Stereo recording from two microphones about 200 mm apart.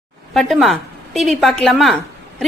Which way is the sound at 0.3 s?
Centre (ahead or behind).